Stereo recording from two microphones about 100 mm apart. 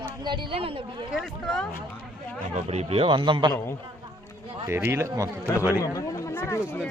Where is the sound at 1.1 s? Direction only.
Centre (ahead or behind).